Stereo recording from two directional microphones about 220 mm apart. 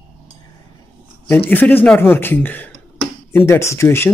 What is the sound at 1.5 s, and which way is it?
Speech, 10° left (ahead or behind).